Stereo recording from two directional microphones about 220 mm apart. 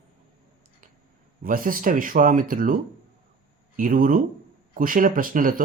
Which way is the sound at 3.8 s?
40° right (ahead or behind).